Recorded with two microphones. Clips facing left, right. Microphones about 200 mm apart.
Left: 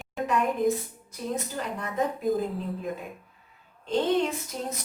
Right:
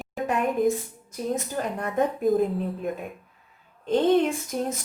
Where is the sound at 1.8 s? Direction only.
55° right (ahead or behind).